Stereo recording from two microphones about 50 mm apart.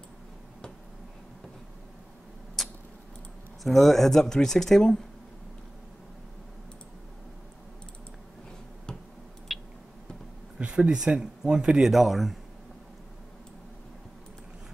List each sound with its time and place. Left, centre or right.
2.6 s tick-tock: centre
3.6 s speech: centre
9.5 s a sound: centre
10.6 s a sound: right
11.1 s speech: centre
11.8 s speech: centre